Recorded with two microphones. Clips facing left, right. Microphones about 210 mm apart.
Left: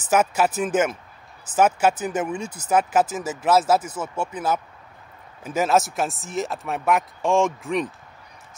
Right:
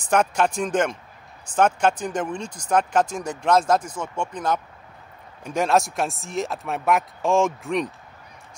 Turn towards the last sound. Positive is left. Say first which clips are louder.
# even
turn(degrees=0)  # may be behind; listen again after turning